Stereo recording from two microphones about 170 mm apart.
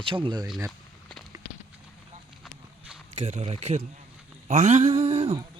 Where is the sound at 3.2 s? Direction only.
35° right (ahead or behind).